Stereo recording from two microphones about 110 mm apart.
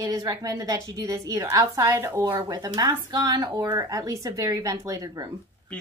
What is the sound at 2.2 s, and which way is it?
Speech, 40° right (ahead or behind).